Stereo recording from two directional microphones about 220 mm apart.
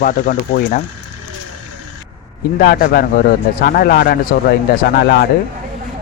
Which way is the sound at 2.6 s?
45° left (ahead or behind).